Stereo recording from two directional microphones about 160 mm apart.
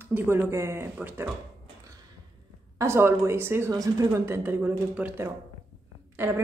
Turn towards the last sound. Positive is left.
turn(degrees=-15)  # may be behind; listen again after turning